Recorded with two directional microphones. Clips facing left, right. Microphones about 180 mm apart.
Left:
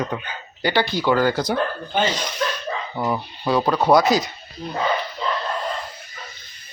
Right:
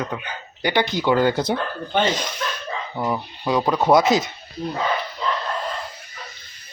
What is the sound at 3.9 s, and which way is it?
Speech, 20° right (ahead or behind).